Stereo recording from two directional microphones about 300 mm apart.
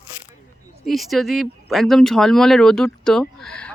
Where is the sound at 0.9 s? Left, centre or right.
Centre.